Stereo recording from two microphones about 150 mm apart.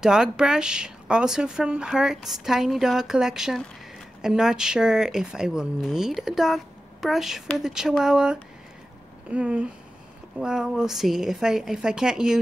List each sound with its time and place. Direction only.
0.0 s speech: 5° right (ahead or behind)